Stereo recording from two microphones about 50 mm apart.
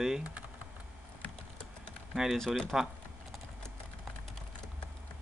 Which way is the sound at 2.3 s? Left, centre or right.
Centre.